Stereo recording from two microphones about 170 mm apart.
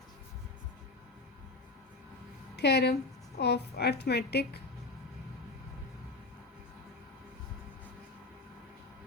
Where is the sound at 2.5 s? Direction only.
75° left (ahead or behind).